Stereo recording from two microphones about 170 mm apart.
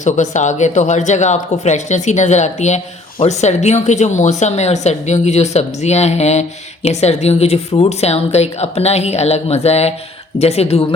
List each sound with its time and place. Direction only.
0.0 s a woman's voice: 45° left (ahead or behind)